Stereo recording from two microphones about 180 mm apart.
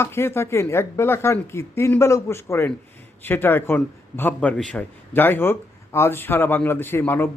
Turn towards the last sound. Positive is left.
turn(degrees=10)  # may be behind; listen again after turning